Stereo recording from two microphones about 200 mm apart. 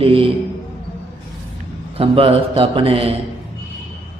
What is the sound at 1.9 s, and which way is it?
A man's voice, 30° right (ahead or behind).